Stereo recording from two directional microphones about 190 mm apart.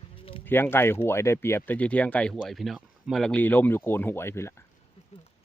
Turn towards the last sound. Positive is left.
turn(degrees=15)  # may be behind; listen again after turning